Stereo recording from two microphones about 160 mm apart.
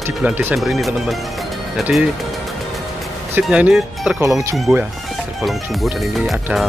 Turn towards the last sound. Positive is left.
turn(degrees=0)  # may be behind; listen again after turning